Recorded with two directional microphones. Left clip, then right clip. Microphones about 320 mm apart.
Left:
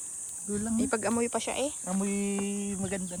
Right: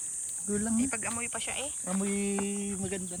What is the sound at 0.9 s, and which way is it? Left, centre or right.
Speech, centre.